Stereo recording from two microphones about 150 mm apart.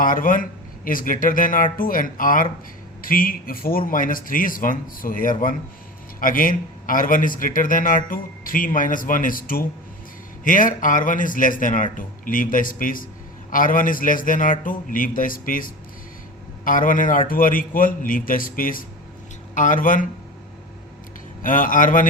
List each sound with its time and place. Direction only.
0.0 s a man's voice: 65° left (ahead or behind)
21.4 s a man's voice: 65° left (ahead or behind)